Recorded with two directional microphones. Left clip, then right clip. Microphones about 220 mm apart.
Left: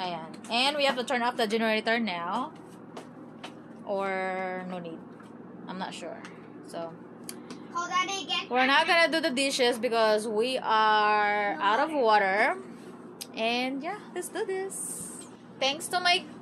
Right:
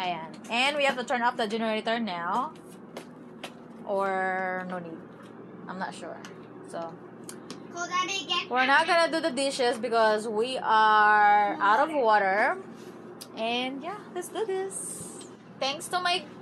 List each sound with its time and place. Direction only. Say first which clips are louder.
0.0 s a woman's voice: right 3 dB; 5° left (ahead or behind)
3.8 s speech: right 3 dB; 5° left (ahead or behind)
5.7 s a woman's voice: right 1 dB; 5° left (ahead or behind)
8.5 s a woman's voice: even; 10° left (ahead or behind)
15.6 s a woman's voice: left 2 dB; 10° left (ahead or behind)